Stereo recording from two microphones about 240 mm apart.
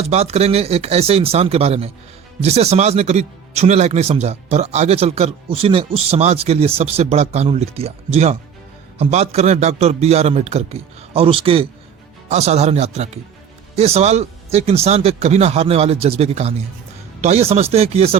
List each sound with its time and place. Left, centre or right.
0.0 s speech: right